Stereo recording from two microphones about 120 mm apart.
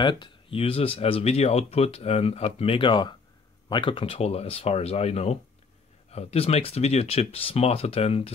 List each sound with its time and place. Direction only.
0.0 s speech: 40° left (ahead or behind); by 8.3 s 55° left (ahead or behind)